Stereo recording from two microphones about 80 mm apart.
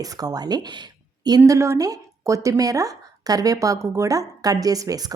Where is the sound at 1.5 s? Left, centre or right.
Right.